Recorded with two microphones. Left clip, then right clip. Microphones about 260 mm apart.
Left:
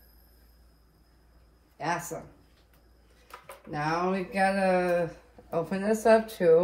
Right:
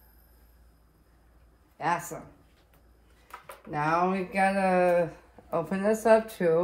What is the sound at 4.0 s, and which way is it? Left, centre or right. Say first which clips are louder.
Speech: even; right.